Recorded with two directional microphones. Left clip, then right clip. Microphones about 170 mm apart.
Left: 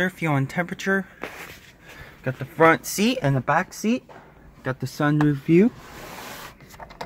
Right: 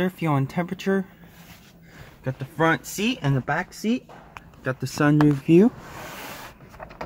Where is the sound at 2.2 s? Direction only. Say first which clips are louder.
Left 5 dB; 25° left (ahead or behind).